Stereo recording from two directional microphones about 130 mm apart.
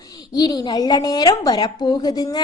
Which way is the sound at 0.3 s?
30° left (ahead or behind).